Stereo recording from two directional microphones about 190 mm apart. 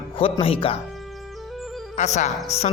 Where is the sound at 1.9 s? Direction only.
40° left (ahead or behind).